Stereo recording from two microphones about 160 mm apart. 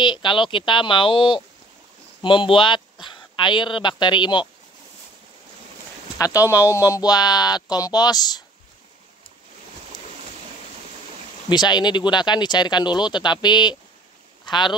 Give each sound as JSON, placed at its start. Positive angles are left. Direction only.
{"t": 0.0, "sound": "speech", "side_deg": 30}
{"t": 6.1, "sound": "speech", "side_deg": 20}
{"t": 11.4, "sound": "speech", "side_deg": 25}